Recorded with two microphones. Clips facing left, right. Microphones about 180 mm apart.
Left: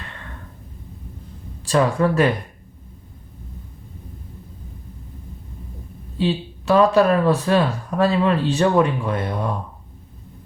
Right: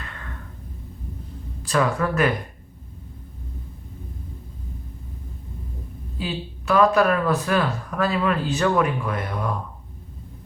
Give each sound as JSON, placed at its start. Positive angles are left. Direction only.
{"t": 1.6, "sound": "speech", "side_deg": 30}
{"t": 6.1, "sound": "speech", "side_deg": 30}